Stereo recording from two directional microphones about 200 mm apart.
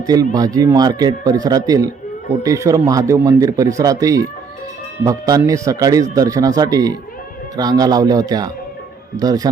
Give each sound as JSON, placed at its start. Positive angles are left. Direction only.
{"t": 0.0, "sound": "a man's voice", "side_deg": -20}